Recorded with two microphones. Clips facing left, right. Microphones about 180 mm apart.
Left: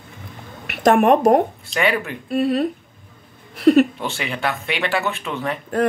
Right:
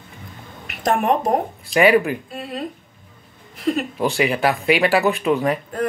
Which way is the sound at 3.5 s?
75° left (ahead or behind).